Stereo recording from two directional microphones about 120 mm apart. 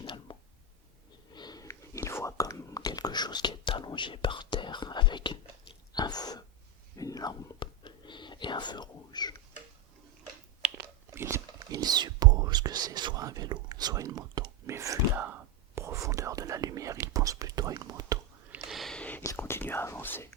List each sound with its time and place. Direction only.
0.0 s a sound: 45° left (ahead or behind)
1.6 s whispering: 25° left (ahead or behind)
11.1 s whispering: 20° right (ahead or behind)
14.7 s whispering: 25° right (ahead or behind)
18.6 s a sound: centre (ahead or behind)
19.2 s whispering: 25° left (ahead or behind)